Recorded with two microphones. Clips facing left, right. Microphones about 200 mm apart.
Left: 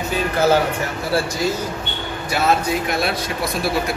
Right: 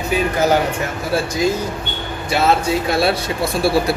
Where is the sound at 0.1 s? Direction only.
15° right (ahead or behind).